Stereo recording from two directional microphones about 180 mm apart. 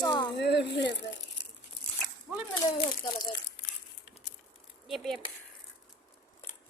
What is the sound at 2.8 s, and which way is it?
Speech, 25° left (ahead or behind).